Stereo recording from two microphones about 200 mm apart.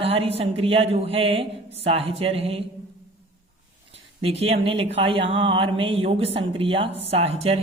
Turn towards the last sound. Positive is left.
turn(degrees=-30)  # may be behind; listen again after turning